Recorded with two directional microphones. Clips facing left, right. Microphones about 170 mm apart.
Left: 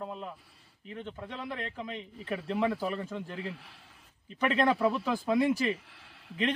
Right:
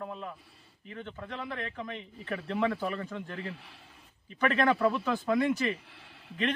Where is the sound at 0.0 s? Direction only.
15° left (ahead or behind).